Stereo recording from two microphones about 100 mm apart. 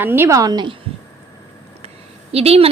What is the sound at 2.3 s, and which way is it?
Speech, 90° right.